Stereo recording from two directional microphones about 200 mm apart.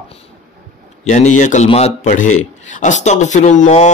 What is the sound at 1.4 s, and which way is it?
Speech, 40° left (ahead or behind).